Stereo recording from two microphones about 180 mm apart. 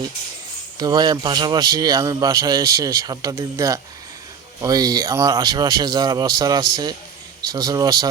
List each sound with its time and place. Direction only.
0.8 s a man's voice: 20° right (ahead or behind)